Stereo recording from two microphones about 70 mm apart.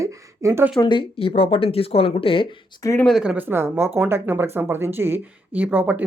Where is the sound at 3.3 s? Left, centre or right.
Right.